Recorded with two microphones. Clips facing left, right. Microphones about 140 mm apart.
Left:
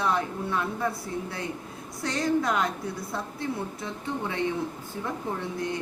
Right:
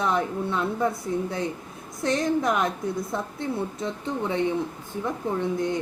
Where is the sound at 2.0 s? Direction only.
20° right (ahead or behind).